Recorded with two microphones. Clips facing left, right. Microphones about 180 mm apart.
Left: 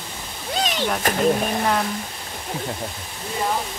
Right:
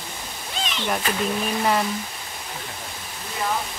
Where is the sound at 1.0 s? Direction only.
45° left (ahead or behind).